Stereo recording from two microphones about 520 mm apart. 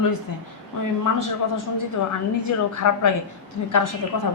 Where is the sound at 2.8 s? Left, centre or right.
Left.